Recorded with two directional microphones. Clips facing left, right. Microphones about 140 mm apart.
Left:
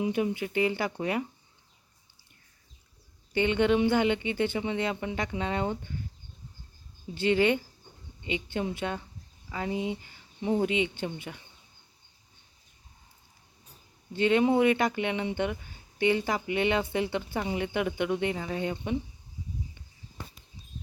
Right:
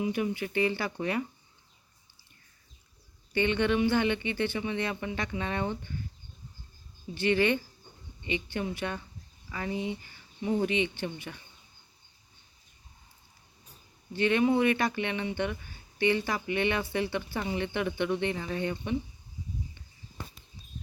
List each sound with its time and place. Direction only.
0.0 s speech: 20° left (ahead or behind)
3.3 s speech: 15° left (ahead or behind)
7.1 s speech: 20° left (ahead or behind)
14.1 s speech: 20° left (ahead or behind)